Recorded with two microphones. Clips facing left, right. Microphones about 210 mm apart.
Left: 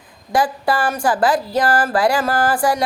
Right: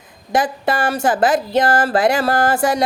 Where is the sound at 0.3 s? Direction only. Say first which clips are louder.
Even; 20° right (ahead or behind).